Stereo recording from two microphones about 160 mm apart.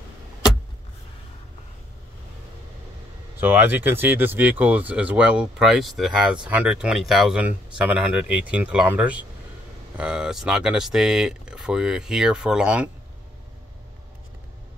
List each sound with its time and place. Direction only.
3.3 s speech: 10° right (ahead or behind)